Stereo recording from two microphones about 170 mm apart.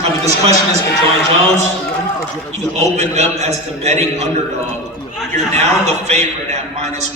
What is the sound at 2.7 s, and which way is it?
A man's voice, 40° right (ahead or behind).